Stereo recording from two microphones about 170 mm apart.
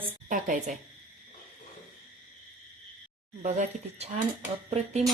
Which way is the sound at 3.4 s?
45° right (ahead or behind).